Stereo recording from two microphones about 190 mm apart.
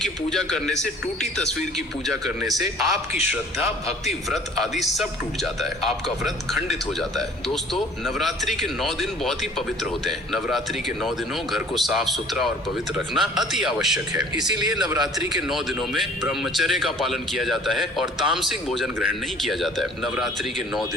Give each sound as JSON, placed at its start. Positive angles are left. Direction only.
{"t": 0.0, "sound": "a man's voice", "side_deg": 0}
{"t": 4.0, "sound": "a man's voice", "side_deg": 0}
{"t": 14.8, "sound": "a man's voice", "side_deg": -20}
{"t": 15.3, "sound": "a man's voice", "side_deg": 0}